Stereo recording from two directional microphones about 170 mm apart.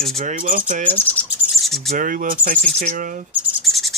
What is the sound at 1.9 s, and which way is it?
Speech, 50° right (ahead or behind).